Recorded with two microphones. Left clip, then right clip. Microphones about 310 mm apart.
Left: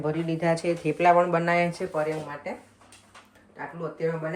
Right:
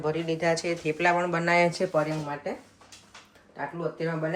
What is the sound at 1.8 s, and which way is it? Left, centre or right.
Speech, right.